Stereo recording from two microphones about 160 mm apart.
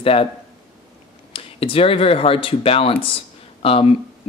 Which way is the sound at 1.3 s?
35° left (ahead or behind).